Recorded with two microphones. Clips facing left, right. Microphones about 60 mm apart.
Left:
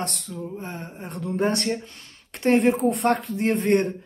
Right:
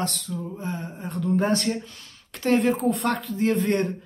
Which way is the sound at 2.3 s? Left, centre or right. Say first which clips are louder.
Left 2 dB; left.